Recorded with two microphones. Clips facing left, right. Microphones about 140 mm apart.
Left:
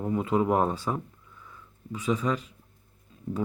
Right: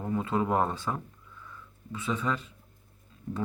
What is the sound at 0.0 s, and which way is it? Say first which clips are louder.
Speech: left 3 dB; 15° left (ahead or behind).